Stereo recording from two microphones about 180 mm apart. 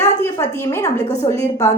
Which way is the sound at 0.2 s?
15° left (ahead or behind).